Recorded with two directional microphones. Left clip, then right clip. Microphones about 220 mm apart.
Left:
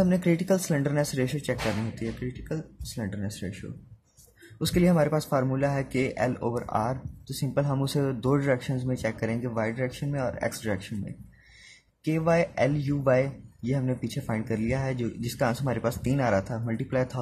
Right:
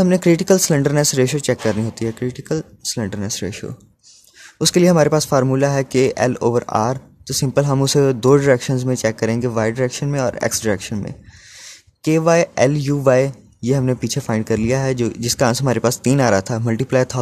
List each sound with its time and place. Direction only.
0.0 s speech: 50° right (ahead or behind)